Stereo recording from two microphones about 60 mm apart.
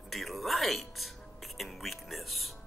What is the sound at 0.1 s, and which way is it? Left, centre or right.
Music, centre.